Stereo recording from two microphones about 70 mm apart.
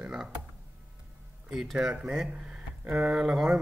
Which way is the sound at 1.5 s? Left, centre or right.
Centre.